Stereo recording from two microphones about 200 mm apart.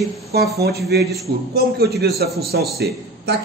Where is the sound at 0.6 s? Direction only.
50° right (ahead or behind).